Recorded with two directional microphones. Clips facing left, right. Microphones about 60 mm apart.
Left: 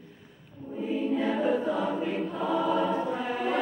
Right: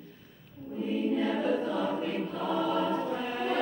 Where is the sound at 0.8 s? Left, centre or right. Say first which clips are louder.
Left 1 dB; centre.